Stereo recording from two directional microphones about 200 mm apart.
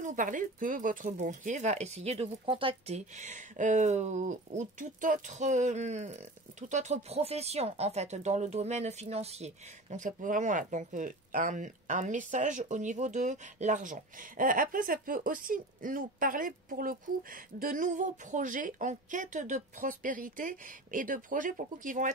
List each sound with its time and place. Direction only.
0.0 s speech: 40° right (ahead or behind)